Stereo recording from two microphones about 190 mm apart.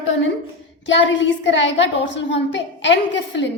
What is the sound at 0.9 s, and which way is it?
A woman's voice, 70° left (ahead or behind).